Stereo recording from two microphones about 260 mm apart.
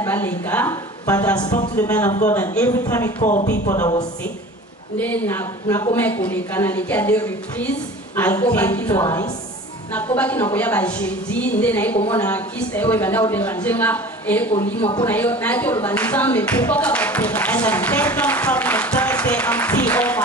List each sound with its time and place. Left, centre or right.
0.0 s a woman's voice: centre
3.2 s speech: left
4.9 s speech: centre
10.1 s speech: centre
14.5 s speech: left
15.0 s speech: centre